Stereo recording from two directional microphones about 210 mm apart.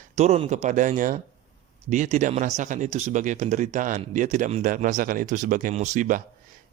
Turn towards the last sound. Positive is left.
turn(degrees=-35)  # may be behind; listen again after turning